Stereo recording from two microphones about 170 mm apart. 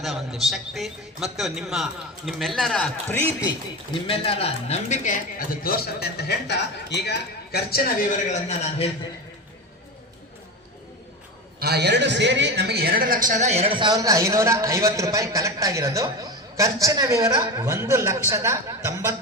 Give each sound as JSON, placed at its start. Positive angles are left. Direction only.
{"t": 0.0, "sound": "a man's voice", "side_deg": 0}
{"t": 4.0, "sound": "speech", "side_deg": 35}
{"t": 5.6, "sound": "a man's voice", "side_deg": 70}
{"t": 8.3, "sound": "speech", "side_deg": 40}
{"t": 11.6, "sound": "a man's voice", "side_deg": -75}